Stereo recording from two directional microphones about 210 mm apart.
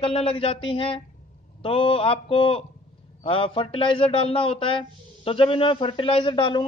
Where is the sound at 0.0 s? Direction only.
25° left (ahead or behind).